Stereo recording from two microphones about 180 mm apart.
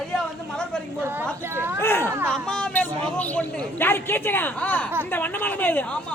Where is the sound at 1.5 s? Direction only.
10° right (ahead or behind).